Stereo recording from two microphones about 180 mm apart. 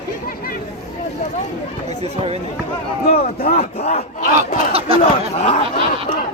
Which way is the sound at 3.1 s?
55° left (ahead or behind).